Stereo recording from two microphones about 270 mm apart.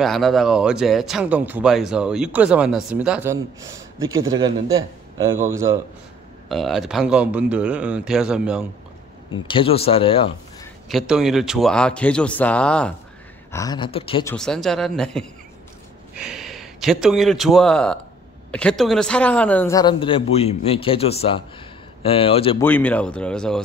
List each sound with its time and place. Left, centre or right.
0.0 s a man's voice: centre
6.5 s speech: centre
9.3 s speech: centre
10.9 s speech: centre
14.3 s a man's voice: centre
22.6 s speech: centre